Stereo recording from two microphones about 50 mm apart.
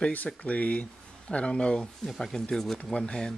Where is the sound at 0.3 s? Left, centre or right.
Left.